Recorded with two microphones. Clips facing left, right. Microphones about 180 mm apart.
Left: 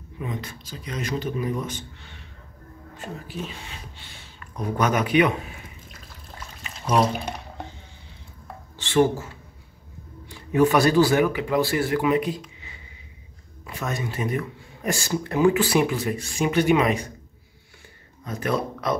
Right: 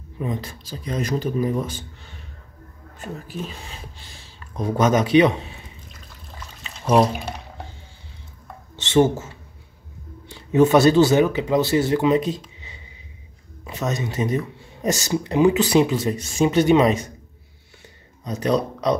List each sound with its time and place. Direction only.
0.2 s speech: 35° right (ahead or behind)
3.3 s speech: 40° right (ahead or behind)
6.9 s speech: 5° right (ahead or behind)
8.7 s speech: 20° right (ahead or behind)
18.2 s speech: 20° right (ahead or behind)